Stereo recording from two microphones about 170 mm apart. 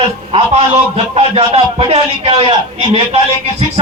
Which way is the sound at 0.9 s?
35° right (ahead or behind).